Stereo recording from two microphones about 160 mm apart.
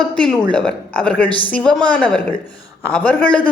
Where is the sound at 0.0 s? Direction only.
5° left (ahead or behind).